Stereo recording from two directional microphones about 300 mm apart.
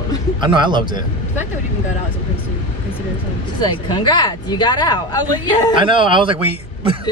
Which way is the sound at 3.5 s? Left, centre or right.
Centre.